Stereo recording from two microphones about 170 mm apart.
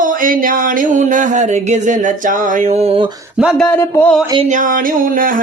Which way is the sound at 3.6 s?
10° left (ahead or behind).